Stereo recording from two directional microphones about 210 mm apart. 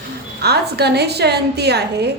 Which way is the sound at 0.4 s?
50° right (ahead or behind).